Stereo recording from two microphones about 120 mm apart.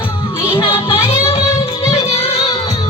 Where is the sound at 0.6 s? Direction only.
50° left (ahead or behind).